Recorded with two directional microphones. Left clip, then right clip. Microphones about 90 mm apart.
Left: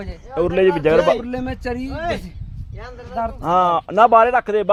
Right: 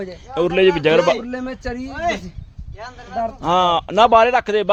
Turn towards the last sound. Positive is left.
turn(degrees=-25)  # may be behind; listen again after turning